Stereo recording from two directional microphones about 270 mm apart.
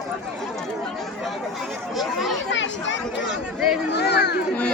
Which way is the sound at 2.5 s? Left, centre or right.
Left.